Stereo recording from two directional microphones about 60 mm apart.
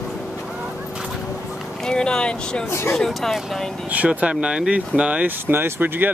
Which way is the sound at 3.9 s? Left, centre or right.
Centre.